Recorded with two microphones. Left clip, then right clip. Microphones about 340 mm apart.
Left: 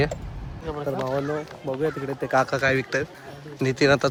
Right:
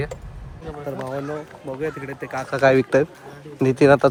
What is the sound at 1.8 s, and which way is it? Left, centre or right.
Speech, centre.